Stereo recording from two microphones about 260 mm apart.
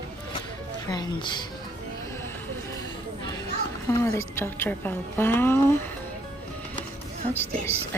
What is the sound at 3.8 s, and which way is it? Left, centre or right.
A woman's voice, centre.